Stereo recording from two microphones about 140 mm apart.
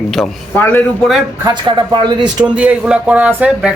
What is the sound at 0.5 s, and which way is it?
Speech, 15° left (ahead or behind).